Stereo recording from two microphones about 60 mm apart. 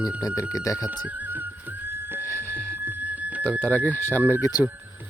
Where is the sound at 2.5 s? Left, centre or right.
Left.